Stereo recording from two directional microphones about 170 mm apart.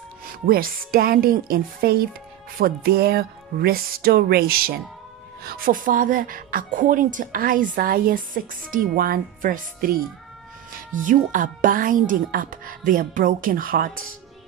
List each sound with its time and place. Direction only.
0.2 s speech: 60° right (ahead or behind)
11.0 s speech: 50° right (ahead or behind)